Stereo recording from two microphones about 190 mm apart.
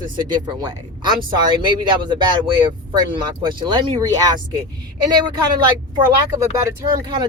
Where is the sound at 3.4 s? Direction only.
25° right (ahead or behind).